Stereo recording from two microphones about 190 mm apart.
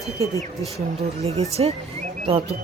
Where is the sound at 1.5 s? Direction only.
35° right (ahead or behind).